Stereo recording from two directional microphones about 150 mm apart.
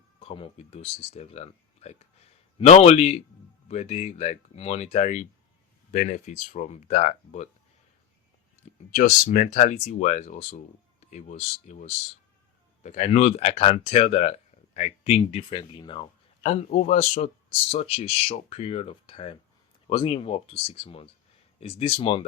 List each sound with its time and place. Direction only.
0.2 s speech: 40° left (ahead or behind)
8.9 s speech: 60° left (ahead or behind); by 16.0 s 35° left (ahead or behind)
16.4 s speech: 50° left (ahead or behind)